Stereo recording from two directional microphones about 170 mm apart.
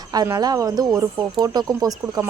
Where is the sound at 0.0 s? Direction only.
25° right (ahead or behind).